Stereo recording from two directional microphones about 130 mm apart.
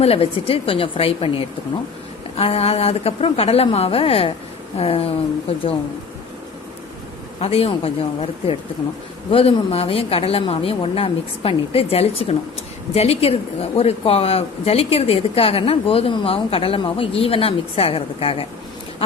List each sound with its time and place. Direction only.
0.0 s speech: 50° left (ahead or behind)
7.4 s speech: 50° left (ahead or behind)